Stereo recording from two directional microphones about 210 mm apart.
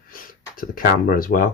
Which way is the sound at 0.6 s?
40° left (ahead or behind).